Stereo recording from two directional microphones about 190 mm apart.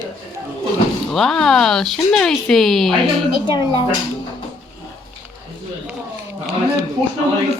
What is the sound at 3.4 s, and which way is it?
Speech, 25° left (ahead or behind).